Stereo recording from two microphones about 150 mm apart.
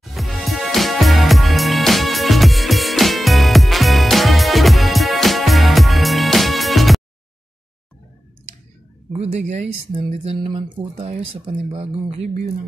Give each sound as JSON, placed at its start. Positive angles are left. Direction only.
{"t": 0.0, "sound": "music", "side_deg": 0}
{"t": 9.1, "sound": "speech", "side_deg": -50}
{"t": 10.1, "sound": "speech", "side_deg": -40}